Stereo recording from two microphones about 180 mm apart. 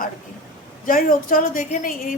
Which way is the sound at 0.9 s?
50° left (ahead or behind).